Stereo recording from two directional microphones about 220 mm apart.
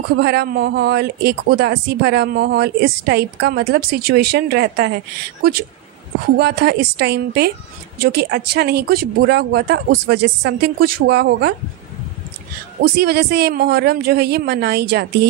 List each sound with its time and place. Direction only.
0.1 s speech: 50° right (ahead or behind)
12.8 s speech: 45° right (ahead or behind)